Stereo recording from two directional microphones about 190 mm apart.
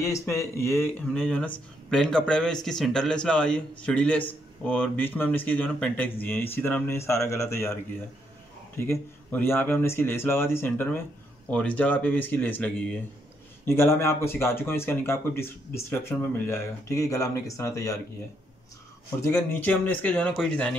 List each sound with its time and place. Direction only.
0.0 s speech: 15° left (ahead or behind)
19.2 s speech: 10° left (ahead or behind)